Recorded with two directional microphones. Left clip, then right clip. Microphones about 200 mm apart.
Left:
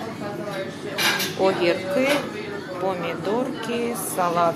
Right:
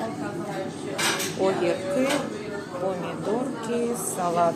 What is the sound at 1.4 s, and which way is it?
Dishes, centre (ahead or behind).